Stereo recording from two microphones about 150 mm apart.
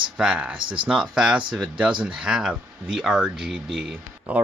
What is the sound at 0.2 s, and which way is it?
Speech, 5° right (ahead or behind).